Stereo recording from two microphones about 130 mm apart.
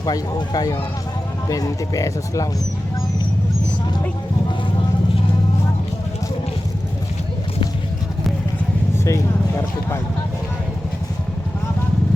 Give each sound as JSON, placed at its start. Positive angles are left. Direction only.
{"t": 0.0, "sound": "speech", "side_deg": 30}
{"t": 9.0, "sound": "speech", "side_deg": 20}